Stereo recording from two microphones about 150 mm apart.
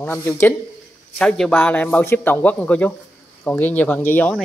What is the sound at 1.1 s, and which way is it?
Speech, 5° left (ahead or behind).